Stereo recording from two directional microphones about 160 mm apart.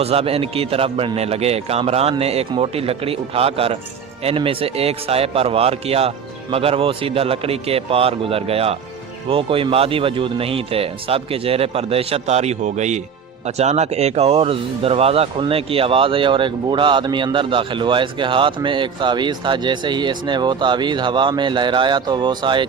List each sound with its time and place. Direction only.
0.0 s speech: 40° right (ahead or behind)